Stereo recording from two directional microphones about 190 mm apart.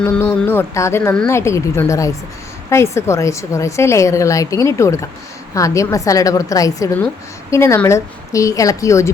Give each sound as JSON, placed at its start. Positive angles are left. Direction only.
{"t": 0.0, "sound": "a woman's voice", "side_deg": 10}